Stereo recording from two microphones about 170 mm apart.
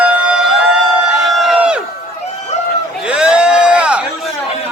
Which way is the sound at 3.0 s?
5° right (ahead or behind).